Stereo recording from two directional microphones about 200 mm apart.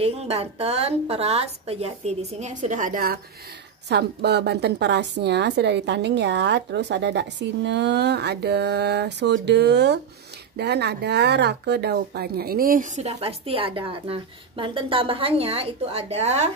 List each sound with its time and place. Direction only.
0.0 s speech: 30° right (ahead or behind)
3.9 s a woman's voice: 55° right (ahead or behind); by 16.4 s 35° right (ahead or behind)